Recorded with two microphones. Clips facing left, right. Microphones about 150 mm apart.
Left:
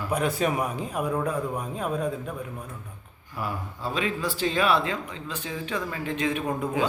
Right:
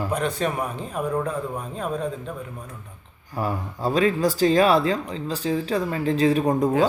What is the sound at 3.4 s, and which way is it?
Speech, 40° right (ahead or behind).